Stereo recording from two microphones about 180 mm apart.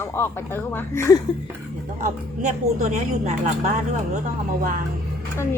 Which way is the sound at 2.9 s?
40° right (ahead or behind).